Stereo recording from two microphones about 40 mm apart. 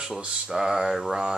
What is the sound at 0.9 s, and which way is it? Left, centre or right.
Mantra, centre.